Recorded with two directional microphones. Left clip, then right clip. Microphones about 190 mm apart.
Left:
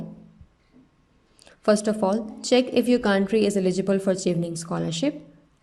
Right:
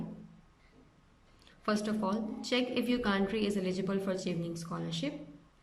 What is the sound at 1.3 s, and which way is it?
A woman's voice, 35° left (ahead or behind).